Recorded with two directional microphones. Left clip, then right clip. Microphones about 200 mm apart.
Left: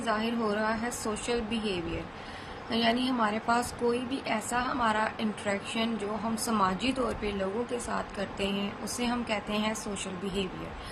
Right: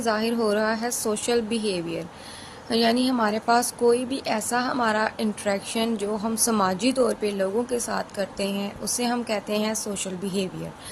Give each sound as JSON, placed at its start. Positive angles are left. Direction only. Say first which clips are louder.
{"t": 0.0, "sound": "a woman's voice", "louder": "right 6 dB", "side_deg": -60}